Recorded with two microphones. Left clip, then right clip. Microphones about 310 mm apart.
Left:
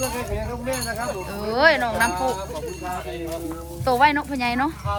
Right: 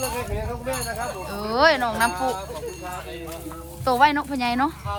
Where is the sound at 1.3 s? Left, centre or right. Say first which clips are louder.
Left 1 dB; centre.